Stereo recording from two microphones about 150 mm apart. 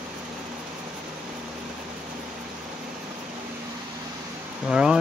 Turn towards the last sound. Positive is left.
turn(degrees=-5)  # may be behind; listen again after turning